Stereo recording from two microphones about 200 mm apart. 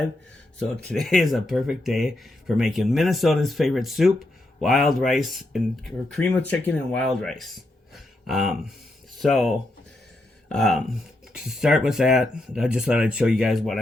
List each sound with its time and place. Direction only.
0.9 s speech: centre (ahead or behind)
7.9 s a sound: centre (ahead or behind)
9.1 s speech: centre (ahead or behind)